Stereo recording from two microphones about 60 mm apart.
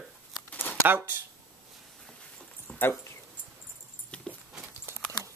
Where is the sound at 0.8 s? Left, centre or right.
Right.